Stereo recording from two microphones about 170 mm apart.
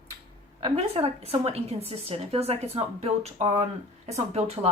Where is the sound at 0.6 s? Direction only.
35° right (ahead or behind).